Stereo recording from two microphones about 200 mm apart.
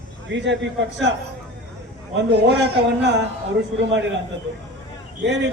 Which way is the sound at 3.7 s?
65° right (ahead or behind).